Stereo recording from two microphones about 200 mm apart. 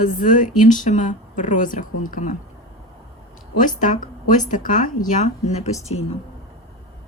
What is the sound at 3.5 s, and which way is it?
Speech, 40° left (ahead or behind).